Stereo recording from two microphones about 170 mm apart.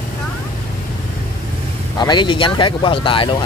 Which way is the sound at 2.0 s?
25° left (ahead or behind).